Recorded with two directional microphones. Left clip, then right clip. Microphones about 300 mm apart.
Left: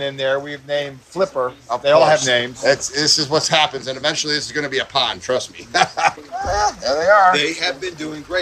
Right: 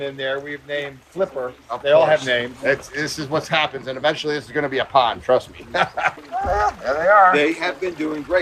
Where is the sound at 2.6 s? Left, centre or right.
Centre.